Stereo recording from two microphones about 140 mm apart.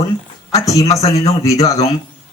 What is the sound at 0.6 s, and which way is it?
Speech, 25° left (ahead or behind).